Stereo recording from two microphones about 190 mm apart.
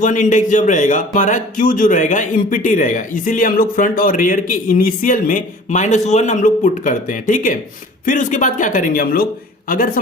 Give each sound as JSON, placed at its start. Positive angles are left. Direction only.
{"t": 0.0, "sound": "a man's voice", "side_deg": 40}